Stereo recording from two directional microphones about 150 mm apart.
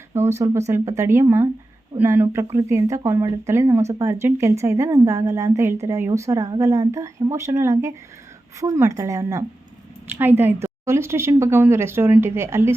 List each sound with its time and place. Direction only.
0.1 s a woman's voice: 15° right (ahead or behind)